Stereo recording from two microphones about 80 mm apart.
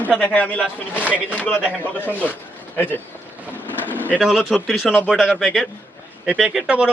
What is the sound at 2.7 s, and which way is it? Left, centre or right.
Speech, left.